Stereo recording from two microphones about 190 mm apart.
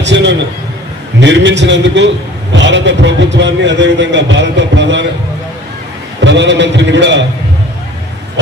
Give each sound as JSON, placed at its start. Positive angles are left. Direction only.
{"t": 0.0, "sound": "a man's voice", "side_deg": -70}
{"t": 6.2, "sound": "a man's voice", "side_deg": -70}